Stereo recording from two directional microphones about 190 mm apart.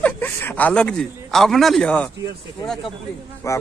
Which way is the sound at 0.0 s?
10° left (ahead or behind).